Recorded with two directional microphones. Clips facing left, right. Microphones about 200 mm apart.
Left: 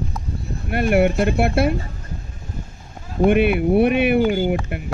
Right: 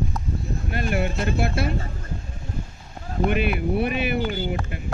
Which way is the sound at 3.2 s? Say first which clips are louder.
Left 7 dB; 55° left (ahead or behind).